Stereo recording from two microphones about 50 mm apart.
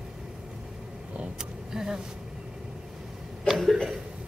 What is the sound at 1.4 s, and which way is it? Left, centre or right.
Vehicle, centre.